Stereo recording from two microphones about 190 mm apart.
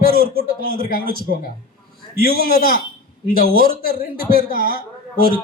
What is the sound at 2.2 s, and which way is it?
A man's voice, 50° right (ahead or behind).